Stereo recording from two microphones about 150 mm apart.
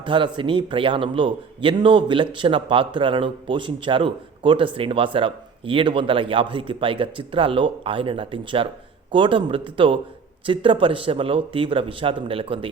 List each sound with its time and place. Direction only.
0.0 s a man's voice: 35° right (ahead or behind)